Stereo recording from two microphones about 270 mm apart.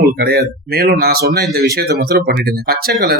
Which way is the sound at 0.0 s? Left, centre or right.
Right.